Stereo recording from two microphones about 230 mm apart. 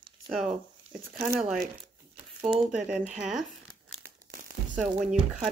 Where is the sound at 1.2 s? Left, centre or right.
Centre.